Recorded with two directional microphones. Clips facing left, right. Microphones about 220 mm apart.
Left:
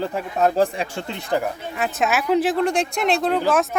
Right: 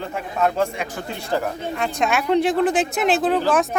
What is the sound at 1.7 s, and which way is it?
Speech, 5° left (ahead or behind).